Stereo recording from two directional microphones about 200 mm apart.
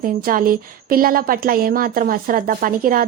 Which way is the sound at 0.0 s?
45° right (ahead or behind).